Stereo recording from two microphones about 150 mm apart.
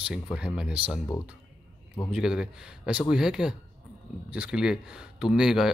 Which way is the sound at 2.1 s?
5° right (ahead or behind).